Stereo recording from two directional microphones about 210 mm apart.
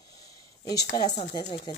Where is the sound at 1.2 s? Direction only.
30° left (ahead or behind).